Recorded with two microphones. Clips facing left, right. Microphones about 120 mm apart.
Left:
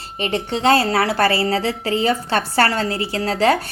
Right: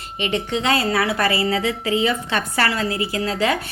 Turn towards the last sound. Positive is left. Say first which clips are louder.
# left 4 dB
turn(degrees=30)  # may be behind; listen again after turning